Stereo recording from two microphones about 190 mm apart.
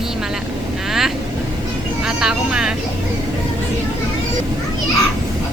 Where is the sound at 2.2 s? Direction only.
5° right (ahead or behind).